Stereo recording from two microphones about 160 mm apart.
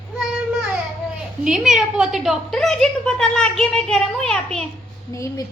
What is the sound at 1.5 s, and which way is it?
A woman's voice, 5° right (ahead or behind).